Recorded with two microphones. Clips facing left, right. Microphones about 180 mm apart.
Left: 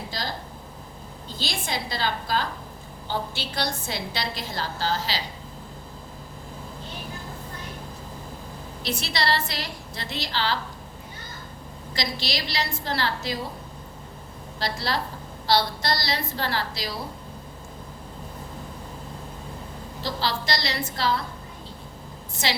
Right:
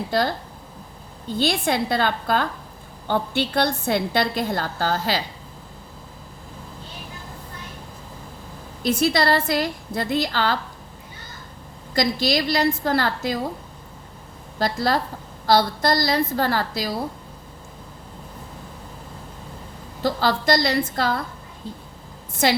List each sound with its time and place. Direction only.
0.1 s a woman's voice: 60° right (ahead or behind)
1.4 s a woman's voice: 60° right (ahead or behind)
8.8 s a woman's voice: 50° right (ahead or behind)
11.9 s a woman's voice: 50° right (ahead or behind)
14.6 s a woman's voice: 50° right (ahead or behind)
20.0 s a woman's voice: 50° right (ahead or behind)